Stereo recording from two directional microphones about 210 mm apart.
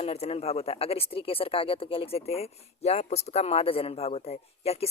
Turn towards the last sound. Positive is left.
turn(degrees=30)  # may be behind; listen again after turning